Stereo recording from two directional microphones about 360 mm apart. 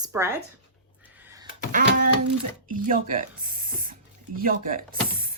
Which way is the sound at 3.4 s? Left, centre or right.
Right.